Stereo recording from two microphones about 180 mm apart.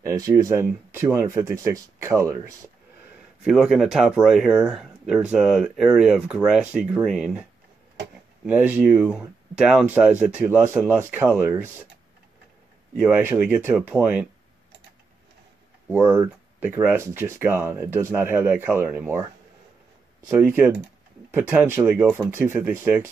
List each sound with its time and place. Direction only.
0.0 s speech: 15° right (ahead or behind)
3.4 s speech: centre (ahead or behind)
8.5 s speech: 10° right (ahead or behind)
12.9 s speech: 10° right (ahead or behind)
15.9 s speech: 10° right (ahead or behind)